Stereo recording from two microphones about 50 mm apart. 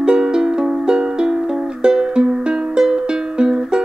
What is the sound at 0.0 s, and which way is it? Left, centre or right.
Music, centre.